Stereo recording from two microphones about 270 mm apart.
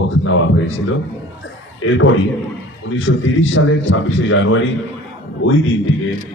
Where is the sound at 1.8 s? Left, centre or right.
Left.